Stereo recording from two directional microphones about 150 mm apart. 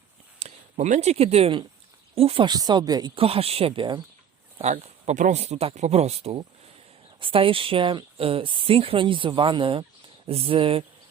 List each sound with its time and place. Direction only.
0.3 s speech: 50° right (ahead or behind); by 3.1 s 25° right (ahead or behind)
3.2 s speech: 40° right (ahead or behind)
4.5 s speech: 50° right (ahead or behind)